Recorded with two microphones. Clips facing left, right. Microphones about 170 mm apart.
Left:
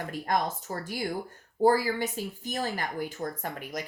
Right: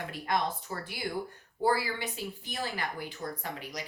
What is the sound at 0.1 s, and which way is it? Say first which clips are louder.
Speech: left 2 dB; 45° left (ahead or behind).